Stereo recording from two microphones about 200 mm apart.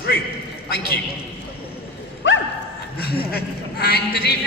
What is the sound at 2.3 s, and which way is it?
Bow-wow, 70° left (ahead or behind).